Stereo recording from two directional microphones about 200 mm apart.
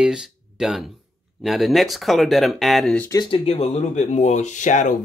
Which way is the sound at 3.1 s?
25° left (ahead or behind).